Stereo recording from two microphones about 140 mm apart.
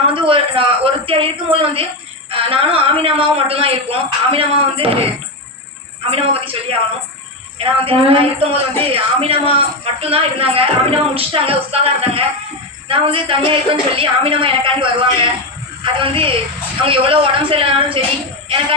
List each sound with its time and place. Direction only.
0.1 s a man's voice: 40° right (ahead or behind)
6.1 s a man's voice: 40° right (ahead or behind)